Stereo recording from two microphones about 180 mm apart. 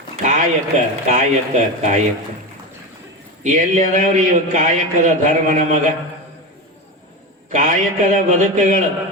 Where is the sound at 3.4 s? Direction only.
45° right (ahead or behind).